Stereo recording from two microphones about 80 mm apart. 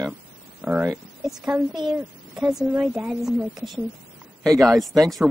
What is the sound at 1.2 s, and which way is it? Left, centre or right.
Speech, centre.